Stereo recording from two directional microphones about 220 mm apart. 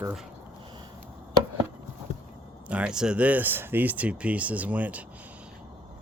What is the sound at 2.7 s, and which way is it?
Speech, 5° right (ahead or behind).